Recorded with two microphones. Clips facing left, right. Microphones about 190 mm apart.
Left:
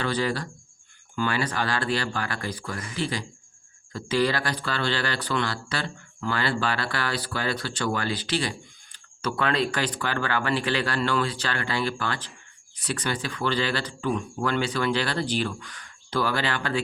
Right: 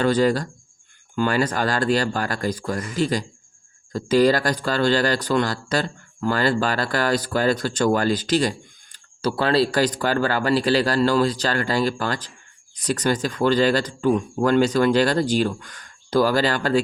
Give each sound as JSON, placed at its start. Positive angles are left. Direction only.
{"t": 0.0, "sound": "speech", "side_deg": -45}